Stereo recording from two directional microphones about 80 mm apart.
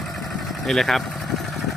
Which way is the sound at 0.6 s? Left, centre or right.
Centre.